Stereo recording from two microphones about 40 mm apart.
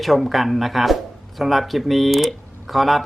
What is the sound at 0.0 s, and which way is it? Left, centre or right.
Speech, centre.